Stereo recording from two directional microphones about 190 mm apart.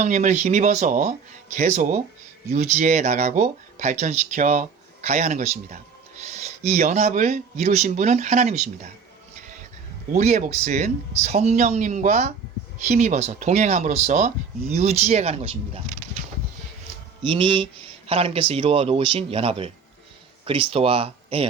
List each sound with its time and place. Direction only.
0.0 s speech: 40° right (ahead or behind)
10.1 s speech: 40° right (ahead or behind)
17.2 s mantra: 25° right (ahead or behind)
18.1 s speech: 30° right (ahead or behind)